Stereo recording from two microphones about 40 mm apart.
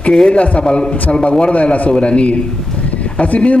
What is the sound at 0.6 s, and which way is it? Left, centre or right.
A man's voice, left.